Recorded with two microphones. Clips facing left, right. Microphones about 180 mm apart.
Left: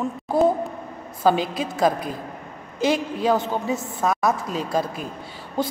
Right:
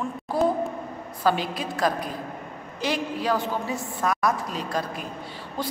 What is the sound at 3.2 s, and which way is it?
Speech, 20° left (ahead or behind).